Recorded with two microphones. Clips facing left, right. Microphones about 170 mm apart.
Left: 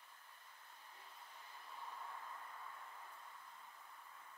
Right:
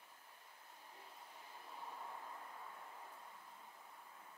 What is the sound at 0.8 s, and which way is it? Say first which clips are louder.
Vehicle: right 3 dB; 15° right (ahead or behind).